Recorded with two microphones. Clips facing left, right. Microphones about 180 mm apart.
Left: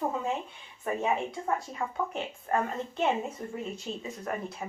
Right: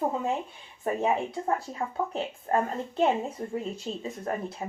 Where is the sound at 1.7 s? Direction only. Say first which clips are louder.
Right 2 dB; 35° right (ahead or behind).